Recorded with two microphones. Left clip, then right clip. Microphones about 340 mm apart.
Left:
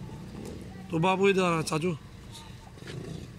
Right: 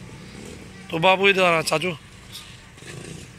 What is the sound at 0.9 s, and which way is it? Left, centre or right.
A man's voice, centre.